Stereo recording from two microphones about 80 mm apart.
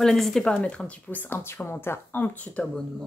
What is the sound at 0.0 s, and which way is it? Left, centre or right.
Speech, centre.